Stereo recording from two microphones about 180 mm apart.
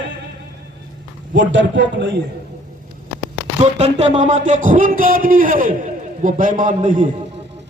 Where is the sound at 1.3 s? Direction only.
90° right.